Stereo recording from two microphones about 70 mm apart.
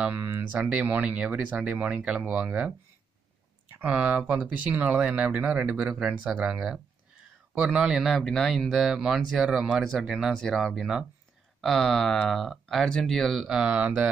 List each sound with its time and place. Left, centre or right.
0.1 s speech: right
3.8 s speech: centre
8.0 s speech: centre
10.3 s speech: centre
10.6 s speech: centre
11.6 s speech: centre
13.5 s speech: centre